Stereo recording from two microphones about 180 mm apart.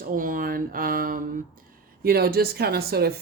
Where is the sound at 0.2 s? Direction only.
50° right (ahead or behind).